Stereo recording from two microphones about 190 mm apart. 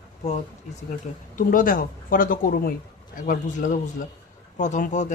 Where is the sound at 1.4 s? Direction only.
45° left (ahead or behind).